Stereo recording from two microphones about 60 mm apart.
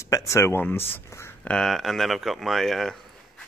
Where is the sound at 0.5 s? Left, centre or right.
Left.